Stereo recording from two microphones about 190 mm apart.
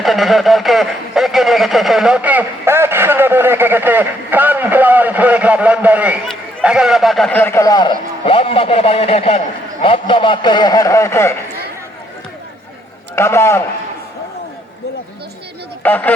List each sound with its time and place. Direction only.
0.0 s a sound: centre (ahead or behind); by 9.4 s 30° left (ahead or behind)
9.8 s a man's voice: 30° left (ahead or behind)
13.1 s a man's voice: 15° left (ahead or behind)
15.8 s speech: 10° left (ahead or behind)